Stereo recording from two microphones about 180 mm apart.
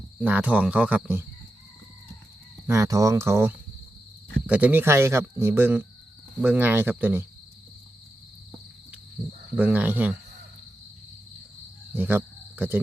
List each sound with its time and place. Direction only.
0.2 s speech: 10° right (ahead or behind)
2.6 s speech: 15° right (ahead or behind)
9.6 s speech: 10° right (ahead or behind)
11.9 s speech: 10° right (ahead or behind)